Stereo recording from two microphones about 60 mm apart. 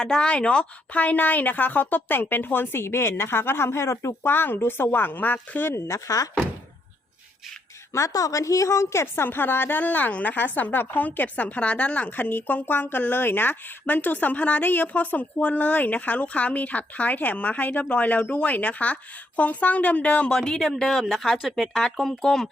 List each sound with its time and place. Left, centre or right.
0.0 s speech: centre; by 5.7 s left
5.7 s speech: left
7.9 s a woman's voice: left
20.3 s speech: centre
21.0 s speech: centre